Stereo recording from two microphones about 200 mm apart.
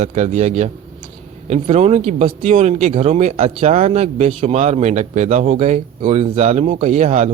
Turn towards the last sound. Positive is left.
turn(degrees=-35)  # may be behind; listen again after turning